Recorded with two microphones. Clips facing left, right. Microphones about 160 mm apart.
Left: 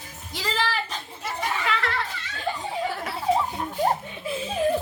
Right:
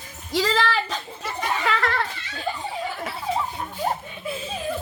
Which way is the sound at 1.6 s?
40° right (ahead or behind).